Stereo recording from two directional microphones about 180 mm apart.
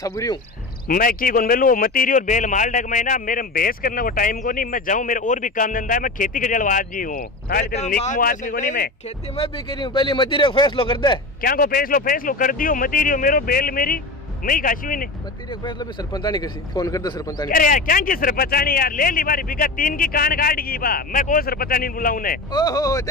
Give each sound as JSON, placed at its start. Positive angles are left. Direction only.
{"t": 0.0, "sound": "speech", "side_deg": 20}
{"t": 0.8, "sound": "a man's voice", "side_deg": 50}
{"t": 9.4, "sound": "speech", "side_deg": 25}
{"t": 11.4, "sound": "a man's voice", "side_deg": 50}
{"t": 15.6, "sound": "speech", "side_deg": 25}
{"t": 17.5, "sound": "a man's voice", "side_deg": 50}
{"t": 22.5, "sound": "speech", "side_deg": 20}